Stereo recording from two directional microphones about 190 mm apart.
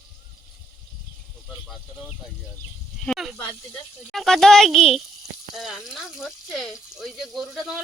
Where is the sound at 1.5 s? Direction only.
Centre (ahead or behind).